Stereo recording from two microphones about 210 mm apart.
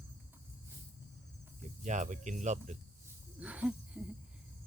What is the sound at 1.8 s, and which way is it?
Speech, 35° right (ahead or behind).